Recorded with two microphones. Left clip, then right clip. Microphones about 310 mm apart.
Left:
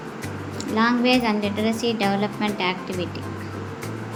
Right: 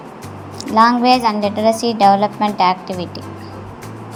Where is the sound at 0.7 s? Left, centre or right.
Centre.